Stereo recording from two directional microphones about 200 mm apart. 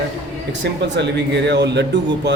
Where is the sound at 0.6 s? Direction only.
60° right (ahead or behind).